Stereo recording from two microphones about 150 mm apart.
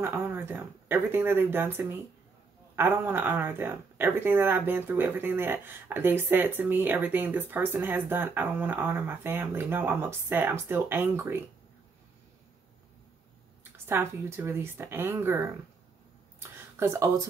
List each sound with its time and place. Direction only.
0.0 s speech: 15° right (ahead or behind)
13.8 s speech: 15° right (ahead or behind)
16.3 s a sound: 15° right (ahead or behind)